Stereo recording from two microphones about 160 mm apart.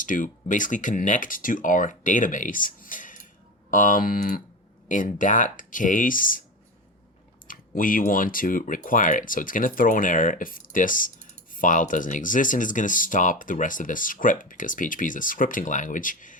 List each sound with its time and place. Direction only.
0.0 s speech: 55° left (ahead or behind)
7.4 s speech: 60° left (ahead or behind)